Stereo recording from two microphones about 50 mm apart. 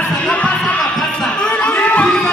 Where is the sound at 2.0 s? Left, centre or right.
Centre.